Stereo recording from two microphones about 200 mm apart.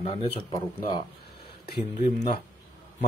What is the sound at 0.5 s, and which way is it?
Speech, 20° left (ahead or behind).